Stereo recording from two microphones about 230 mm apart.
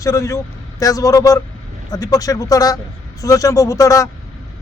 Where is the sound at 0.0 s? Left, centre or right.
Centre.